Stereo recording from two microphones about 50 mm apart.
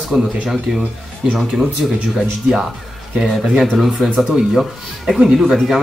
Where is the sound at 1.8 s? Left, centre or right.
Centre.